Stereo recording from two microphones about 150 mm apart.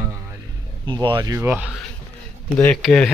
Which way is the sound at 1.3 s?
15° right (ahead or behind).